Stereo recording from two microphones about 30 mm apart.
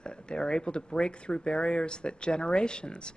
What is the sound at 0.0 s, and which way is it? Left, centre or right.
Speech, left.